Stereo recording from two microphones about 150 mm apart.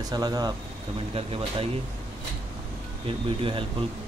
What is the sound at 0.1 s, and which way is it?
Speech, 25° right (ahead or behind).